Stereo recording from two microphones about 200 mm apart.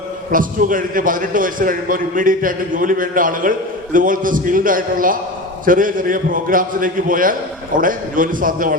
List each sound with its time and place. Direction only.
0.3 s a man's voice: 45° right (ahead or behind)